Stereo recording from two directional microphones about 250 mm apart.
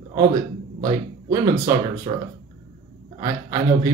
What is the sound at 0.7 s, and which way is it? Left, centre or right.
Speech, centre.